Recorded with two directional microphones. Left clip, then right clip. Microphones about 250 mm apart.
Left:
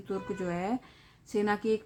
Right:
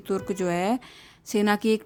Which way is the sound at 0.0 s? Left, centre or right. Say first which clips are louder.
Right 7 dB; right.